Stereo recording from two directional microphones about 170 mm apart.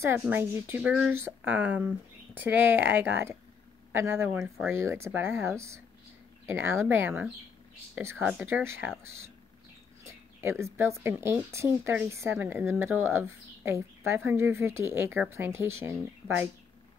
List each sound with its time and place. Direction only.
0.2 s speech: 15° right (ahead or behind)
10.0 s speech: 15° right (ahead or behind)